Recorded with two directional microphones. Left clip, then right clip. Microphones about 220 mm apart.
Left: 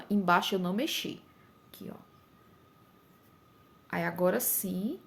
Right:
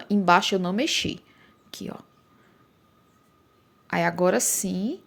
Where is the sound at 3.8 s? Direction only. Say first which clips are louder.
Right 7 dB; 35° right (ahead or behind).